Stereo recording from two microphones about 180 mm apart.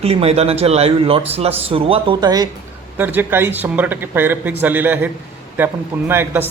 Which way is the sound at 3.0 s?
10° right (ahead or behind).